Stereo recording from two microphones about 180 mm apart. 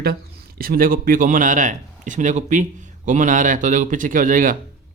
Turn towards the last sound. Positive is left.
turn(degrees=-50)  # may be behind; listen again after turning